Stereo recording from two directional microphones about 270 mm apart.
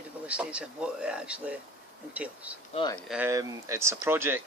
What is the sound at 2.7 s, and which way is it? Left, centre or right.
Speech, centre.